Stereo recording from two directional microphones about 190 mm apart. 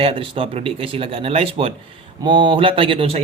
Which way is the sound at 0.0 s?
30° right (ahead or behind).